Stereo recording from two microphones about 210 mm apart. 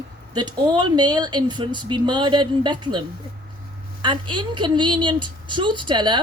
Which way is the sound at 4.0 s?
20° right (ahead or behind).